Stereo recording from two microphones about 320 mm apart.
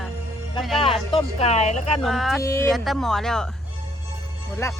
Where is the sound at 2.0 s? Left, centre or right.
Centre.